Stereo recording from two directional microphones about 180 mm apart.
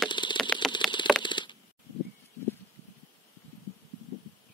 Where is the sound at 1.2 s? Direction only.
25° left (ahead or behind).